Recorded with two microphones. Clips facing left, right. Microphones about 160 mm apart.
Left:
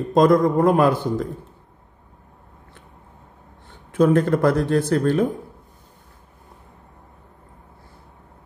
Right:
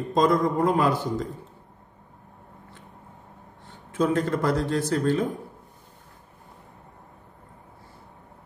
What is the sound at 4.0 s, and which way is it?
A man's voice, 55° left (ahead or behind).